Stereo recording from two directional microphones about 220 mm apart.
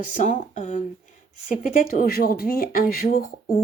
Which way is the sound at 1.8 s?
40° left (ahead or behind).